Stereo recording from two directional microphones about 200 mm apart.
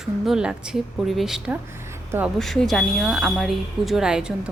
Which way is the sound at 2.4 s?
Centre (ahead or behind).